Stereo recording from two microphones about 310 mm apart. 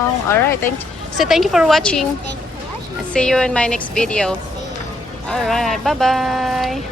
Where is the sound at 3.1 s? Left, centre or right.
Centre.